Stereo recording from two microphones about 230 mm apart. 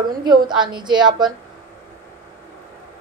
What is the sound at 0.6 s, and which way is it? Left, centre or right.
Speech, centre.